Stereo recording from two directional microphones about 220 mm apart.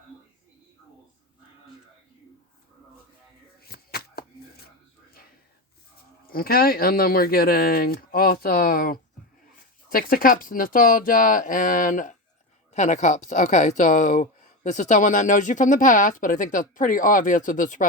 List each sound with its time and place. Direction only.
3.6 s chopping: 45° left (ahead or behind)
6.3 s speech: 40° left (ahead or behind)